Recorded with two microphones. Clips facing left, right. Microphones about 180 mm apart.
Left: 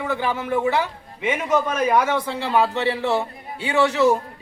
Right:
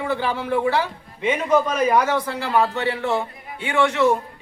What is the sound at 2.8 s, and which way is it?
A man's voice, 30° left (ahead or behind).